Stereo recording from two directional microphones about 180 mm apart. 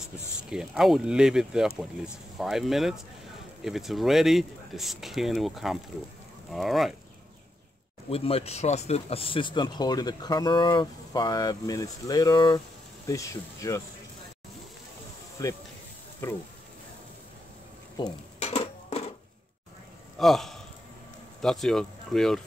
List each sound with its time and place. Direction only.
0.0 s speech: 5° right (ahead or behind)
8.1 s speech: 35° left (ahead or behind)
18.0 s speech: 25° left (ahead or behind)
18.4 s a sound: 35° left (ahead or behind)
20.2 s speech: centre (ahead or behind)